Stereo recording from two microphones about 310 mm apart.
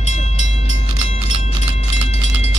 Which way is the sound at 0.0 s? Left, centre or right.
Left.